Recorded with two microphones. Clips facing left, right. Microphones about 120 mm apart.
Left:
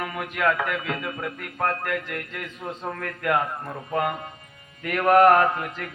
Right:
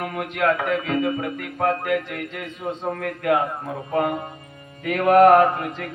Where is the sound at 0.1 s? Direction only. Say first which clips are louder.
Right 3 dB; 55° right (ahead or behind).